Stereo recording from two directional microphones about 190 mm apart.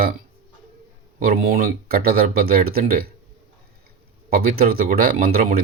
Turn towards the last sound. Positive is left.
turn(degrees=-50)  # may be behind; listen again after turning